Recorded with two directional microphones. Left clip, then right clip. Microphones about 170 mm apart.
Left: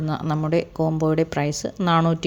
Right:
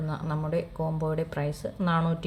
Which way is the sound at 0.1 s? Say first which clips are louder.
Left 8 dB; 45° left (ahead or behind).